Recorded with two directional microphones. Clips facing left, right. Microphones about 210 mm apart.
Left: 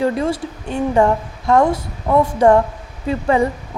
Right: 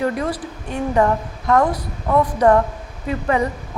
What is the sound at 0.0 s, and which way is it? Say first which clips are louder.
A woman's voice: left 3 dB; 25° left (ahead or behind).